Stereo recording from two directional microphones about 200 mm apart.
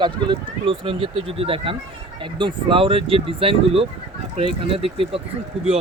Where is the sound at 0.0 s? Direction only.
20° right (ahead or behind).